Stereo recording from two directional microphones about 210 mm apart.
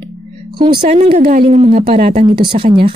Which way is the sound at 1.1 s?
45° right (ahead or behind).